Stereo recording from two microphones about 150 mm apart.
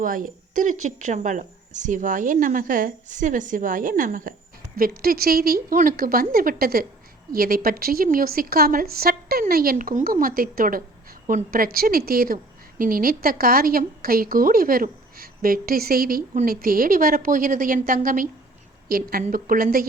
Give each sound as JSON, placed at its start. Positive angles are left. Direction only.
{"t": 0.0, "sound": "speech", "side_deg": -65}
{"t": 4.8, "sound": "a woman's voice", "side_deg": -85}
{"t": 18.9, "sound": "a woman's voice", "side_deg": -75}